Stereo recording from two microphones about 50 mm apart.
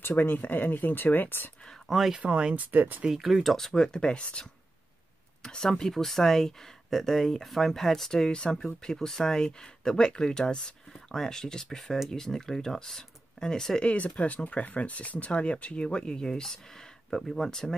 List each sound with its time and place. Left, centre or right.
0.0 s speech: left
1.9 s speech: centre
2.2 s speech: right
3.0 s speech: centre
3.7 s speech: centre
13.8 s speech: left; by 17.7 s centre